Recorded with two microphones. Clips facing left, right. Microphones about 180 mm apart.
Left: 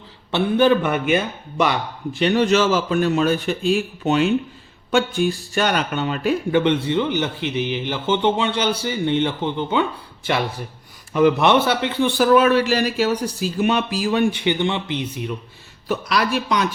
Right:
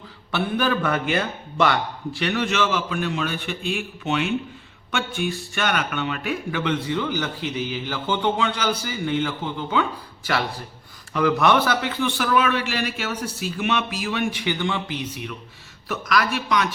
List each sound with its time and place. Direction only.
0.3 s speech: 25° left (ahead or behind)
2.4 s a man's voice: 40° left (ahead or behind)
11.1 s a man's voice: 25° left (ahead or behind)